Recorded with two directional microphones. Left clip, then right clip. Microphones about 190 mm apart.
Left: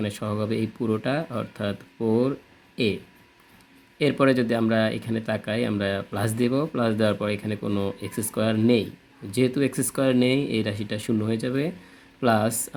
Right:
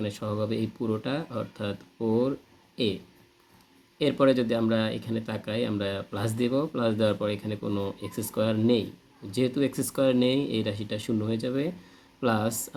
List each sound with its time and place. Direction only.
0.0 s speech: 25° left (ahead or behind)
3.9 s speech: 25° left (ahead or behind)